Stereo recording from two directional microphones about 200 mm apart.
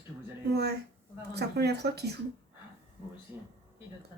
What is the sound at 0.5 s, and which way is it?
Speech, 55° right (ahead or behind).